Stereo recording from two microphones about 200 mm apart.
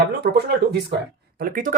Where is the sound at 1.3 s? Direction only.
45° right (ahead or behind).